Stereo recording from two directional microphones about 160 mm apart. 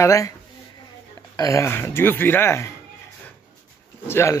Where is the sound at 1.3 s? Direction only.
20° left (ahead or behind).